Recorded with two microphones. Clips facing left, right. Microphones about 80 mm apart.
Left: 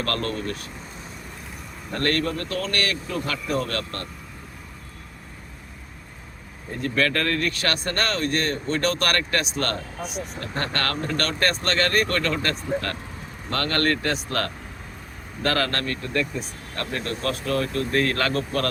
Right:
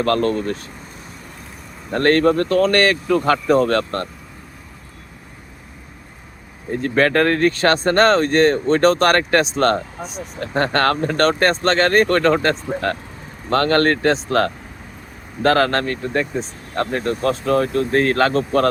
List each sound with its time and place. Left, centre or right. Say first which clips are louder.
0.0 s speech: right 9 dB; right
1.9 s speech: right 10 dB; right
6.7 s speech: right 7 dB; right